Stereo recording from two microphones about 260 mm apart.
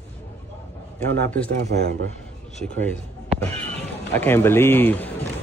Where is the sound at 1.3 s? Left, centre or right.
Centre.